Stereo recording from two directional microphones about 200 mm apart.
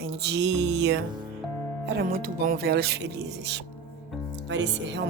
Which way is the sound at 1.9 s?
45° right (ahead or behind).